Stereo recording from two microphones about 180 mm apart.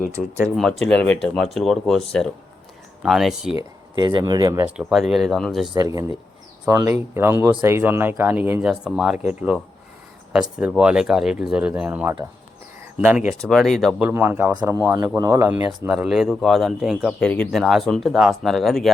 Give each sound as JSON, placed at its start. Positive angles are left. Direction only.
{"t": 0.5, "sound": "speech", "side_deg": 0}
{"t": 3.9, "sound": "speech", "side_deg": -25}
{"t": 4.8, "sound": "speech", "side_deg": 0}
{"t": 5.7, "sound": "speech", "side_deg": -20}
{"t": 10.6, "sound": "speech", "side_deg": -5}
{"t": 14.1, "sound": "speech", "side_deg": -10}